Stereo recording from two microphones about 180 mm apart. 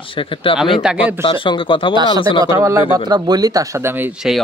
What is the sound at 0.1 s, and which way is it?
Speech, 30° left (ahead or behind).